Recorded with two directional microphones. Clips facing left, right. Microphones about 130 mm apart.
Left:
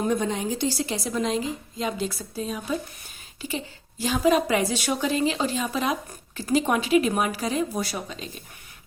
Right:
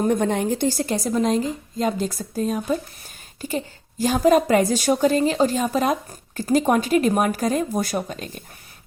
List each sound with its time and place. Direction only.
0.1 s a woman's voice: 60° right (ahead or behind)